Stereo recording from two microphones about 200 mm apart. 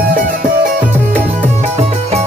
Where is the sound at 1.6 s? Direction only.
30° right (ahead or behind).